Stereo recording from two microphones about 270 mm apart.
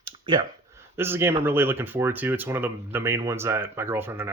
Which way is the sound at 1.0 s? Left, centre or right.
Centre.